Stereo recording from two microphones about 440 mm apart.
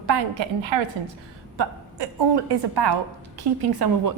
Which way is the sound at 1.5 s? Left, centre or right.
Right.